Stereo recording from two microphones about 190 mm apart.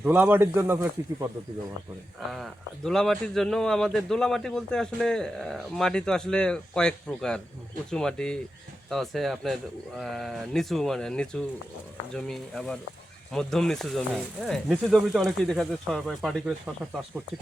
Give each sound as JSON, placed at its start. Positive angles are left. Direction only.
{"t": 0.0, "sound": "speech", "side_deg": -10}
{"t": 2.3, "sound": "a man's voice", "side_deg": 0}